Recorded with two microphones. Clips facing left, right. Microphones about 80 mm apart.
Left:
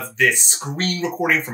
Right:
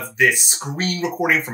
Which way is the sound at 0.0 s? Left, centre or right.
Centre.